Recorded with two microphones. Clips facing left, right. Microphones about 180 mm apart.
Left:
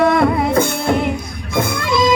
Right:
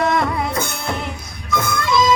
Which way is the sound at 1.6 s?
30° left (ahead or behind).